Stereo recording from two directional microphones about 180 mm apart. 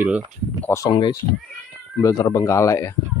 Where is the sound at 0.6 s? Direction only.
15° left (ahead or behind).